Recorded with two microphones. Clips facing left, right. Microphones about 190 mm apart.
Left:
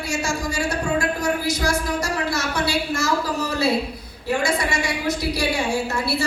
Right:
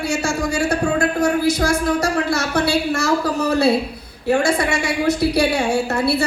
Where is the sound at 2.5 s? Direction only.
65° right (ahead or behind).